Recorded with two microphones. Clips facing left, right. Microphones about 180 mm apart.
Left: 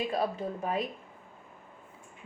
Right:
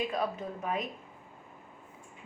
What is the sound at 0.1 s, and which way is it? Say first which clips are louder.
Speech: left 2 dB; 30° left (ahead or behind).